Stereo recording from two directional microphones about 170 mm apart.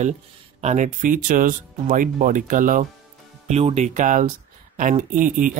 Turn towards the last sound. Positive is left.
turn(degrees=-50)  # may be behind; listen again after turning